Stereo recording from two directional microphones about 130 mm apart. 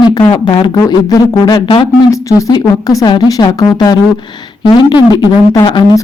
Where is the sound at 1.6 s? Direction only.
40° left (ahead or behind).